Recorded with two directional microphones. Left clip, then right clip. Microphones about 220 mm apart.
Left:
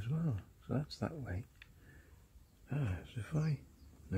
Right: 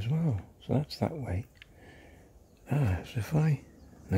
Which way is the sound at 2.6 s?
45° right (ahead or behind).